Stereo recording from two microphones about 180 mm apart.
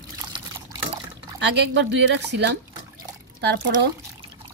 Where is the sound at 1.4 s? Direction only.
75° right (ahead or behind).